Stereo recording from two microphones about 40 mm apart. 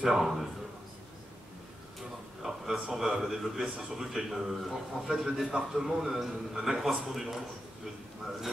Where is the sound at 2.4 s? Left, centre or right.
Centre.